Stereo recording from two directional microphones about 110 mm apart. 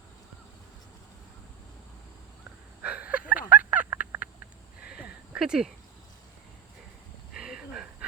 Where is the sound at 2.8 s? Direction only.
10° right (ahead or behind).